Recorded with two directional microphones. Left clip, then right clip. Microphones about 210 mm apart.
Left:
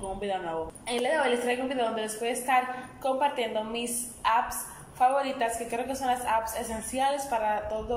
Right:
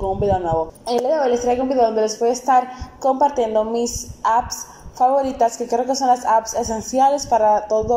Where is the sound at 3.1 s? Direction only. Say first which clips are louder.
Right 10 dB; 25° right (ahead or behind).